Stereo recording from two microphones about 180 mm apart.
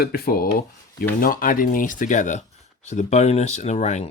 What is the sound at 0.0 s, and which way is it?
Speech, 55° left (ahead or behind).